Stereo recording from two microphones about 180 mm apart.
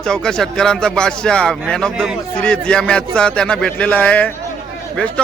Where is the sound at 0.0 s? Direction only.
5° left (ahead or behind).